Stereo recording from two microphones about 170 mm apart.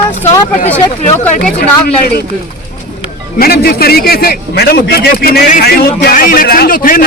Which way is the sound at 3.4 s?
65° left (ahead or behind).